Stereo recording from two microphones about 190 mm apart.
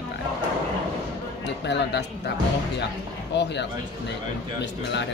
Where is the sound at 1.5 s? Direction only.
65° left (ahead or behind).